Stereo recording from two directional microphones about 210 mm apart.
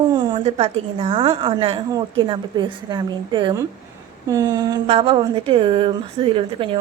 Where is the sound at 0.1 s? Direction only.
20° right (ahead or behind).